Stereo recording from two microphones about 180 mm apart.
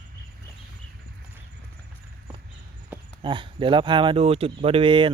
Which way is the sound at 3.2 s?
25° right (ahead or behind).